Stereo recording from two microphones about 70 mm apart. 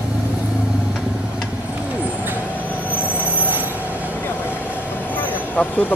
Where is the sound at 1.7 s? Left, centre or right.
Right.